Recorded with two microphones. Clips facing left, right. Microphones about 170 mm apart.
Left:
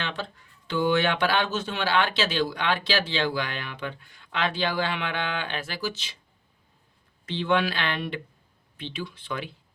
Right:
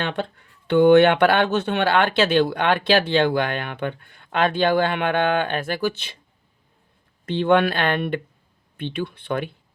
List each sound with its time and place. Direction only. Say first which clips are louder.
0.0 s speech: right 7 dB; 55° right (ahead or behind)
7.3 s speech: right 7 dB; 55° right (ahead or behind)